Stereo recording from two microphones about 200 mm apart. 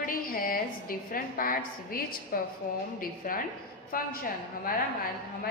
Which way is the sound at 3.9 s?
45° left (ahead or behind).